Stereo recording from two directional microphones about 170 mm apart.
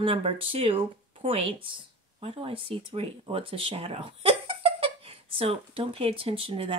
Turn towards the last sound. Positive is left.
turn(degrees=-35)  # may be behind; listen again after turning